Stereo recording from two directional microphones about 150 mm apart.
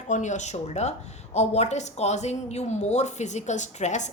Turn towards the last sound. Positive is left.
turn(degrees=55)  # may be behind; listen again after turning